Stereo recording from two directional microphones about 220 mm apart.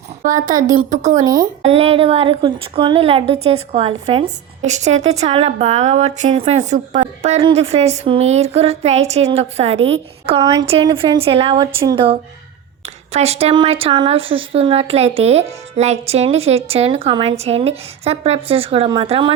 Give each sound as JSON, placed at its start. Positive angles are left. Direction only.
{"t": 0.2, "sound": "a woman's voice", "side_deg": -35}
{"t": 0.5, "sound": "a woman's voice", "side_deg": -15}
{"t": 13.1, "sound": "speech", "side_deg": -30}